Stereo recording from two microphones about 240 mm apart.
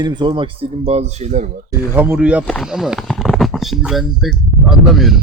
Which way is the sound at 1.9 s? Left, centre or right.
Centre.